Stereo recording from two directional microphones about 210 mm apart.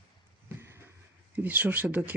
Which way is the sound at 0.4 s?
10° right (ahead or behind).